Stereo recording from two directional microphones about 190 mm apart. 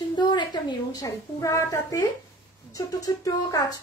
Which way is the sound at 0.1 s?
20° left (ahead or behind).